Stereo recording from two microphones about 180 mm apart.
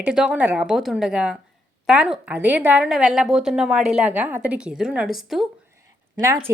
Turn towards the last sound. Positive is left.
turn(degrees=-15)  # may be behind; listen again after turning